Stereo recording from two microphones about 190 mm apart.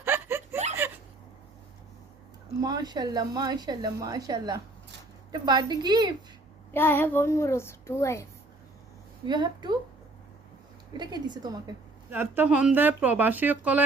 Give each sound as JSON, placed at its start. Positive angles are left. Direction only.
{"t": 0.0, "sound": "a sound", "side_deg": -10}
{"t": 2.6, "sound": "a woman's voice", "side_deg": -20}
{"t": 6.7, "sound": "speech", "side_deg": 10}
{"t": 9.2, "sound": "a woman's voice", "side_deg": -25}
{"t": 10.9, "sound": "a woman's voice", "side_deg": -20}
{"t": 12.1, "sound": "speech", "side_deg": -10}